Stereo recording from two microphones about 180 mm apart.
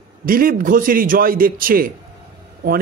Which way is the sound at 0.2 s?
55° right (ahead or behind).